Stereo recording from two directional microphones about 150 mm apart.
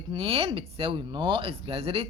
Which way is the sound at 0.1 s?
35° right (ahead or behind).